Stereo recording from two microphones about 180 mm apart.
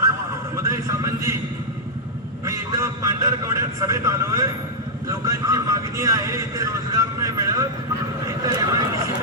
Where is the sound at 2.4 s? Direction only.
15° right (ahead or behind).